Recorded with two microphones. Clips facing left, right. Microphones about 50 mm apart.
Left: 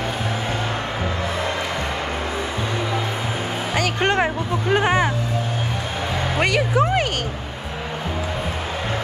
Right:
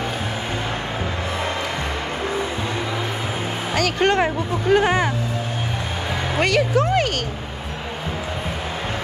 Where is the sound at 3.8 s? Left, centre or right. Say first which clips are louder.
Right 2 dB; left.